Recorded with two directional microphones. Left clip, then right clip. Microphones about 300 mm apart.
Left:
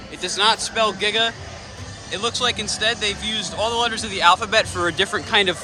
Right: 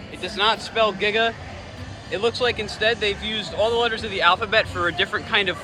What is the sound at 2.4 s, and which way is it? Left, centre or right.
A man's voice, centre.